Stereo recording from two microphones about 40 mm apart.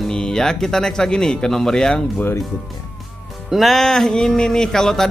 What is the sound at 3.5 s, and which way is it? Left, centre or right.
Music, centre.